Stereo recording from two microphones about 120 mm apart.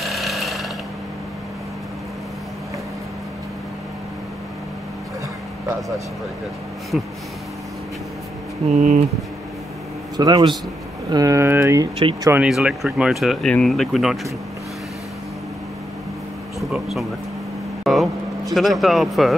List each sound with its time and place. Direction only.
0.0 s tools: centre (ahead or behind)
6.9 s speech: 5° right (ahead or behind)
8.6 s speech: 75° right (ahead or behind)
10.1 s speech: 35° right (ahead or behind)
12.4 s speech: 5° right (ahead or behind)
16.5 s speech: centre (ahead or behind)
17.9 s vehicle: centre (ahead or behind)
18.5 s speech: centre (ahead or behind)